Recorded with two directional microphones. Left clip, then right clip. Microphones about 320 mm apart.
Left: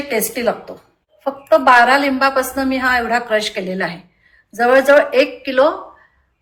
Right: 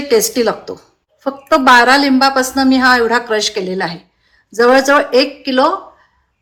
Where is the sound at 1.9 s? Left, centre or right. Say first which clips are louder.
Right 3 dB; centre.